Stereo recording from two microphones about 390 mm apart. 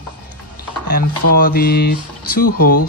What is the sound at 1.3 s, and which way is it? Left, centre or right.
Speech, left.